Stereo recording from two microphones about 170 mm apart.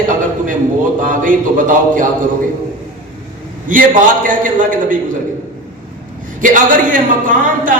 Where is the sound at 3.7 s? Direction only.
50° right (ahead or behind).